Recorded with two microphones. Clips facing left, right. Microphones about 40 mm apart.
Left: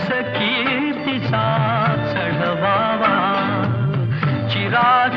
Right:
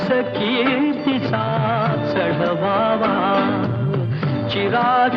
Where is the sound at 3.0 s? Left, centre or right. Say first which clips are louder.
Left 2 dB; left.